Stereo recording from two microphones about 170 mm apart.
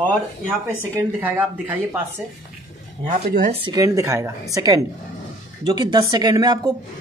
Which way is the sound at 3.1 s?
45° right (ahead or behind).